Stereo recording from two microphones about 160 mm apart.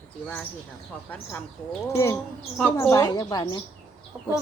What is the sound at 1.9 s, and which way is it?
A woman's voice, 20° left (ahead or behind).